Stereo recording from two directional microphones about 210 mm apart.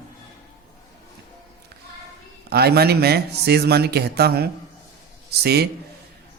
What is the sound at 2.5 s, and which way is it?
Speech, 50° right (ahead or behind).